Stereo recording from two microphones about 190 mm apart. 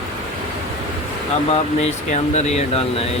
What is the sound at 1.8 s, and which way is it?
Speech, 35° left (ahead or behind).